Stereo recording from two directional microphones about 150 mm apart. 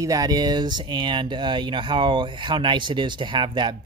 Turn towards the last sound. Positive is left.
turn(degrees=-30)  # may be behind; listen again after turning